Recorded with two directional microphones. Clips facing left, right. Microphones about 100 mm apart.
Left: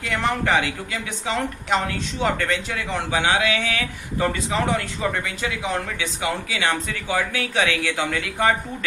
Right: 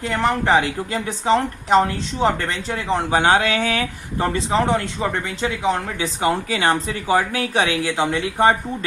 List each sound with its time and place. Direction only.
0.0 s speech: 30° right (ahead or behind)
6.2 s speech: 40° right (ahead or behind)